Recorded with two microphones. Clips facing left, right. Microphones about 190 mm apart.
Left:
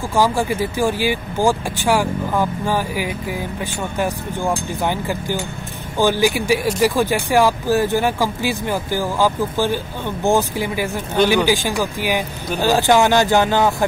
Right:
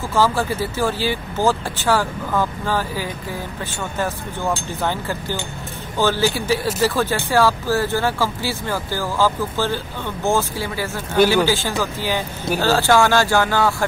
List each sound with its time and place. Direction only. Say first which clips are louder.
0.1 s speech: left 1 dB; 15° left (ahead or behind)